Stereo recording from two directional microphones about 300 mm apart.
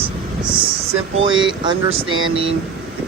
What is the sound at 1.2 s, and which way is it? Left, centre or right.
Speech, centre.